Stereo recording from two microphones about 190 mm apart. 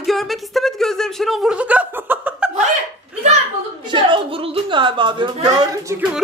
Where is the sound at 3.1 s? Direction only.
5° right (ahead or behind).